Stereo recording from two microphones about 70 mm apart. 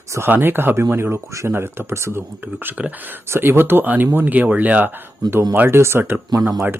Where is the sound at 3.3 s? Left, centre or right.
Right.